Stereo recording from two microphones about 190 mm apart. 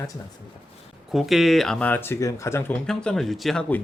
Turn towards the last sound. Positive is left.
turn(degrees=5)  # may be behind; listen again after turning